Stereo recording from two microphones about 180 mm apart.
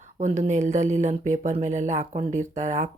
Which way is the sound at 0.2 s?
40° right (ahead or behind).